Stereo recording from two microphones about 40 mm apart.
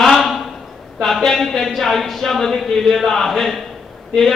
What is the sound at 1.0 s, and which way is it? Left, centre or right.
A man's voice, centre.